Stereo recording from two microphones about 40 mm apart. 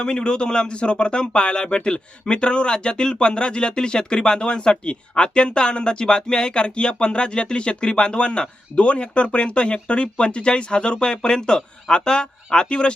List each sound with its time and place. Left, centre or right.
0.0 s speech: left